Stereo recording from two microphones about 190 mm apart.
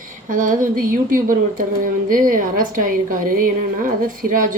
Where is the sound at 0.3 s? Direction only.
45° right (ahead or behind).